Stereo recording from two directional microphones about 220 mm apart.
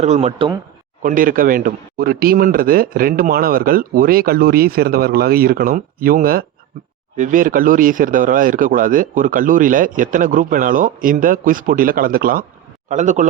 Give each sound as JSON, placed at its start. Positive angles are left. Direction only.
{"t": 0.0, "sound": "speech", "side_deg": -30}
{"t": 1.0, "sound": "a man's voice", "side_deg": -40}